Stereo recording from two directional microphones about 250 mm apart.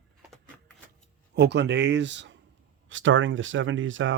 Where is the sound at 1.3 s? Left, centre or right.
Right.